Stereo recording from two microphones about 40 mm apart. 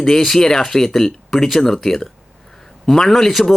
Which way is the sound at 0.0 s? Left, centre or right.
Centre.